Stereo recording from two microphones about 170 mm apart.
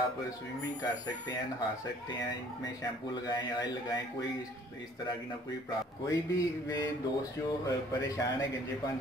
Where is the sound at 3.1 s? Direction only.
25° left (ahead or behind).